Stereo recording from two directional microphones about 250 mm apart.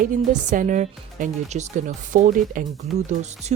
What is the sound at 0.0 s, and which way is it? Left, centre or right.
Speech, right.